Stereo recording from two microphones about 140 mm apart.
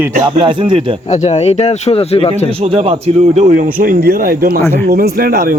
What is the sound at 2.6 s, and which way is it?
Speech, 45° right (ahead or behind).